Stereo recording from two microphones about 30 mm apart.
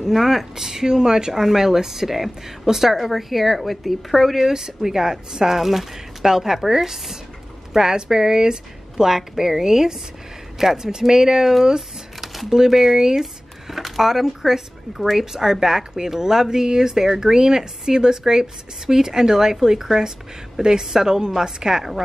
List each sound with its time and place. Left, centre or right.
0.0 s a woman's voice: centre
5.6 s a woman's voice: centre
13.2 s a sound: centre
15.0 s a woman's voice: centre